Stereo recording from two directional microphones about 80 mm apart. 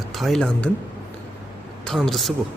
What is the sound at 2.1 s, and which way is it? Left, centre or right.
Speech, centre.